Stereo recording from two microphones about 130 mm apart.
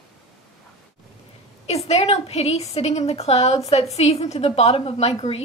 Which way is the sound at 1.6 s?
55° left (ahead or behind).